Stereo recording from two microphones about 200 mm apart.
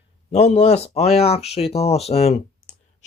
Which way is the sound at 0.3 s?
30° left (ahead or behind).